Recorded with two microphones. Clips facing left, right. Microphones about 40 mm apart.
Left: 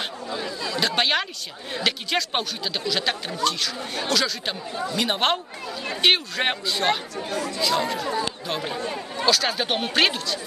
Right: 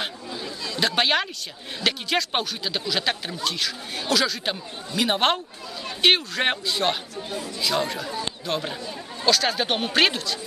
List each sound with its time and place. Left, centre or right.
0.3 s a sound: left
0.7 s speech: centre
7.2 s speech: left
8.0 s speech: left
8.5 s speech: centre
8.7 s speech: left
9.2 s speech: centre